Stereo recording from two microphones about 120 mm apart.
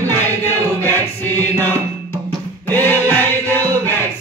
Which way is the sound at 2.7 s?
15° left (ahead or behind).